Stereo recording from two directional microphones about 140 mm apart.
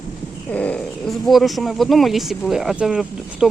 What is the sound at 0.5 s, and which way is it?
Speech, 10° left (ahead or behind).